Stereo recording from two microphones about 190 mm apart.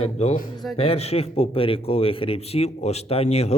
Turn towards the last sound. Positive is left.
turn(degrees=35)  # may be behind; listen again after turning